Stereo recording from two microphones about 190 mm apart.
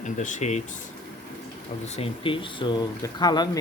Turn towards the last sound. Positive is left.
turn(degrees=20)  # may be behind; listen again after turning